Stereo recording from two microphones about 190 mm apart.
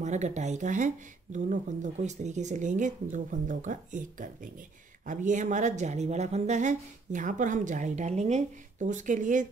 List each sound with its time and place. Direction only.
0.0 s a woman's voice: 40° right (ahead or behind)